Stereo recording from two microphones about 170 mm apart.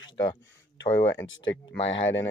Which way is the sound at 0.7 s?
90° left.